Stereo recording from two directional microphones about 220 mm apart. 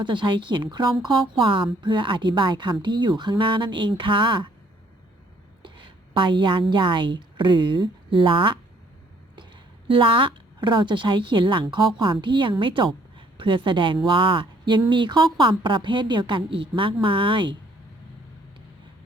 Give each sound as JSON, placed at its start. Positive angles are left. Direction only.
{"t": 0.0, "sound": "speech", "side_deg": -20}
{"t": 5.6, "sound": "a woman's voice", "side_deg": -20}
{"t": 9.9, "sound": "speech", "side_deg": -25}